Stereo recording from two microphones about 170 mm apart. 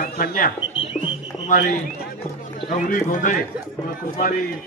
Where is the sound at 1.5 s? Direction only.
50° left (ahead or behind).